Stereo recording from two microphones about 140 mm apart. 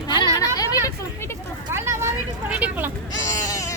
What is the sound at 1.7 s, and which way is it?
Vehicle, 20° right (ahead or behind).